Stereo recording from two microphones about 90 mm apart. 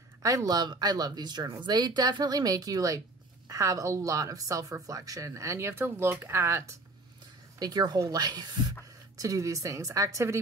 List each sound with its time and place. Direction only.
0.2 s speech: 40° right (ahead or behind)
7.5 s speech: 45° right (ahead or behind)